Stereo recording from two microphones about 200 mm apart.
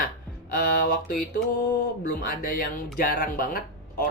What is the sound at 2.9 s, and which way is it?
Speech, 45° left (ahead or behind).